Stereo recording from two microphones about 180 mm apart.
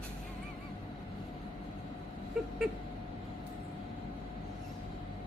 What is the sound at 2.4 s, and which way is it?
Owl, 5° right (ahead or behind).